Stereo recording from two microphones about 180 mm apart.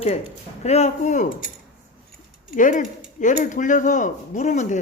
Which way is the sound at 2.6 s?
45° left (ahead or behind).